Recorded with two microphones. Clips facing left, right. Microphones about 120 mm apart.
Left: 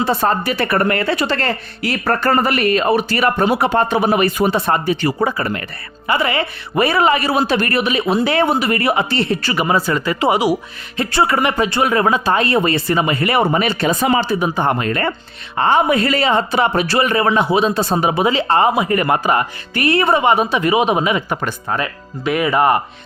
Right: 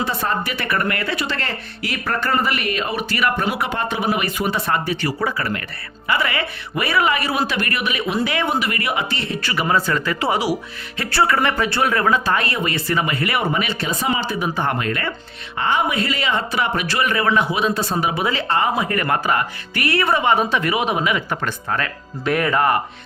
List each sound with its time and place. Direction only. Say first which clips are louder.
0.0 s speech: left 6 dB; 35° left (ahead or behind)
9.6 s speech: left 1 dB; 15° left (ahead or behind); by 13.7 s 40° left (ahead or behind)
13.8 s speech: left 8 dB; 60° left (ahead or behind)
14.2 s speech: left 5 dB; 30° left (ahead or behind)
14.8 s speech: left 5 dB; 35° left (ahead or behind)
18.4 s speech: left 5 dB; 35° left (ahead or behind)
18.8 s speech: left 4 dB; 20° left (ahead or behind)
22.2 s speech: left 2 dB; 5° left (ahead or behind)
22.5 s speech: left 5 dB; 20° left (ahead or behind)